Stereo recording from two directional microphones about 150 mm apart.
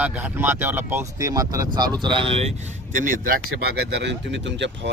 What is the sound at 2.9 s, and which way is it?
Speech, 60° right (ahead or behind).